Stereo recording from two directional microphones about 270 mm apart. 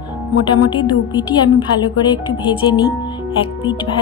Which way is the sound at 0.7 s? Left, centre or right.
Centre.